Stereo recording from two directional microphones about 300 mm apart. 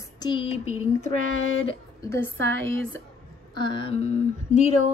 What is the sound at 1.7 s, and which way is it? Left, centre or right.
Speech, centre.